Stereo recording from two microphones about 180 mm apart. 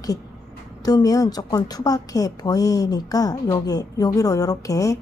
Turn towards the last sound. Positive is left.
turn(degrees=20)  # may be behind; listen again after turning